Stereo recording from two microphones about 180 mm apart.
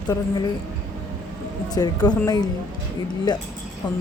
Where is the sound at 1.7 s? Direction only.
20° left (ahead or behind).